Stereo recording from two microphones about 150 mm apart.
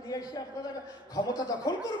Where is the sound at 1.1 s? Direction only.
25° left (ahead or behind).